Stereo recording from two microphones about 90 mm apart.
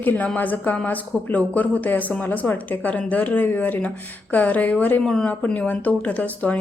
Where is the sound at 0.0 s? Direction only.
20° left (ahead or behind).